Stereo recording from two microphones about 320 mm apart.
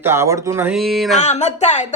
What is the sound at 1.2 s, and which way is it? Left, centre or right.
Speech, left.